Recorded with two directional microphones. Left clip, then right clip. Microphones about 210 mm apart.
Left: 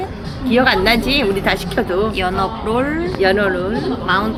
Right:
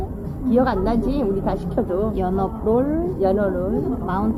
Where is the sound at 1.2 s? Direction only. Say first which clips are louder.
Left 6 dB; 35° left (ahead or behind).